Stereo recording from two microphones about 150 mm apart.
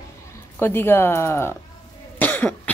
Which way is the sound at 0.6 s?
15° left (ahead or behind).